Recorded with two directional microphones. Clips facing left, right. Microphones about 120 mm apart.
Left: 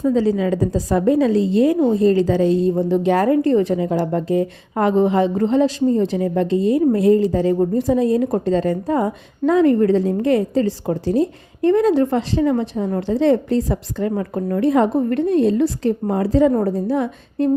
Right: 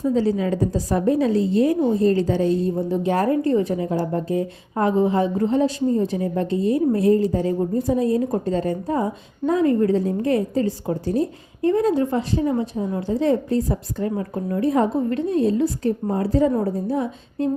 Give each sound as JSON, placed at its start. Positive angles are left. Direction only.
{"t": 0.9, "sound": "a woman's voice", "side_deg": 90}